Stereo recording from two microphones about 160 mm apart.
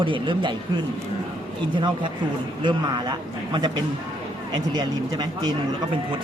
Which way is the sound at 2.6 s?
30° right (ahead or behind).